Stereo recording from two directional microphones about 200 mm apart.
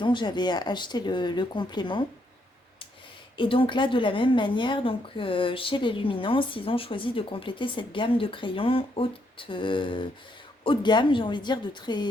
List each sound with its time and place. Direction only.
0.0 s a woman's voice: 25° left (ahead or behind)
3.3 s a woman's voice: 25° left (ahead or behind)